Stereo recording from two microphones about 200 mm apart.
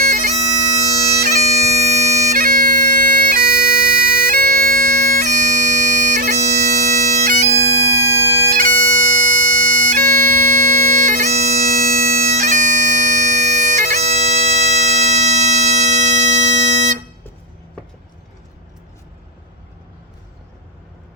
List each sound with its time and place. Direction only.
0.0 s bagpipes: 40° right (ahead or behind)
7.5 s bagpipes: 50° right (ahead or behind); by 17.0 s 35° right (ahead or behind)